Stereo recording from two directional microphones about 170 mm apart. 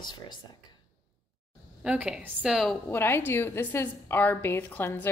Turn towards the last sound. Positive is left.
turn(degrees=10)  # may be behind; listen again after turning